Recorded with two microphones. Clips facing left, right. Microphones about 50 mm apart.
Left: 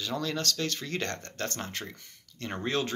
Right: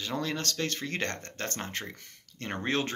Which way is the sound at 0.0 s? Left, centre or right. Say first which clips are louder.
Left 1 dB; right.